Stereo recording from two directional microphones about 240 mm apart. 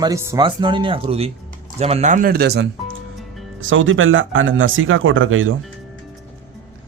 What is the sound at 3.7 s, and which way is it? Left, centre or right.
Speech, right.